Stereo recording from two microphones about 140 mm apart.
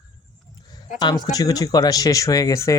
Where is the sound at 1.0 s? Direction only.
30° left (ahead or behind).